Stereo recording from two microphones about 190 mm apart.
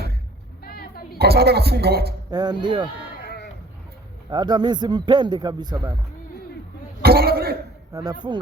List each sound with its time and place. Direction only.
0.6 s a sound: 55° left (ahead or behind)
1.2 s speech: 55° right (ahead or behind)
2.3 s a man's voice: 20° right (ahead or behind)
3.2 s sheep: 55° left (ahead or behind)
4.3 s a man's voice: 20° right (ahead or behind)
7.0 s cough: 55° right (ahead or behind)
7.9 s a man's voice: 20° right (ahead or behind)